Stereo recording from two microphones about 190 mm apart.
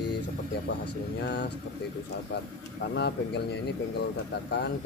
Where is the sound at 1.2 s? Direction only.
65° left (ahead or behind).